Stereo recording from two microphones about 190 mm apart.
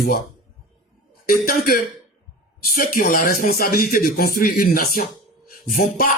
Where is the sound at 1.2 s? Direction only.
50° left (ahead or behind).